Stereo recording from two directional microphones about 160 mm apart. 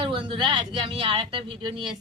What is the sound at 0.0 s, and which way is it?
Speech, 30° right (ahead or behind).